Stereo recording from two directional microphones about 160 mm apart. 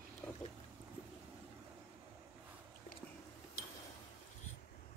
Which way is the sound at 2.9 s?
60° left (ahead or behind).